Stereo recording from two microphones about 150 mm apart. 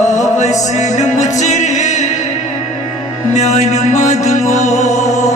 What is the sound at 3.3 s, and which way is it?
Music, 50° left (ahead or behind).